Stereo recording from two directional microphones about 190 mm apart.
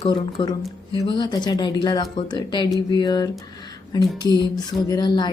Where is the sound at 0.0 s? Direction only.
25° left (ahead or behind).